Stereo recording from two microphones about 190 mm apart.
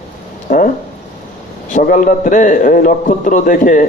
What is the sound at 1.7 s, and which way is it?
A man's voice, 45° left (ahead or behind).